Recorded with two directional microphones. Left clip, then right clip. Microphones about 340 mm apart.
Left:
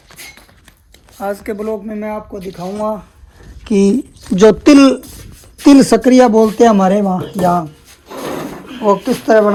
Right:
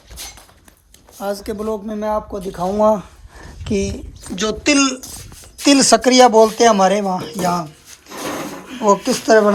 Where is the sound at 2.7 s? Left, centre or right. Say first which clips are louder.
Right 5 dB; right.